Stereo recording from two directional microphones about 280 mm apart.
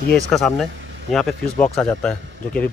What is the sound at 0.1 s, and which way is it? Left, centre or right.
Speech, centre.